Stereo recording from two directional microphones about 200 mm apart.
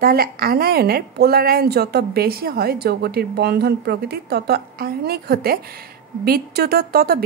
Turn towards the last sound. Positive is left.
turn(degrees=-50)  # may be behind; listen again after turning